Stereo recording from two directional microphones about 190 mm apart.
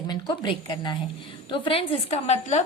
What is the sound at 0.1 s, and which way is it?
A woman's voice, 25° left (ahead or behind).